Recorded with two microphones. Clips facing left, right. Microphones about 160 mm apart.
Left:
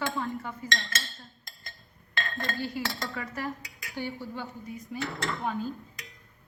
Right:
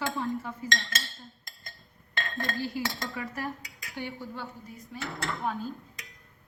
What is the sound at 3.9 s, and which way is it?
Dishes, centre (ahead or behind).